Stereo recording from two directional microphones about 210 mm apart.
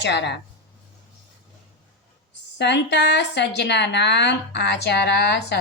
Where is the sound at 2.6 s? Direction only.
55° left (ahead or behind).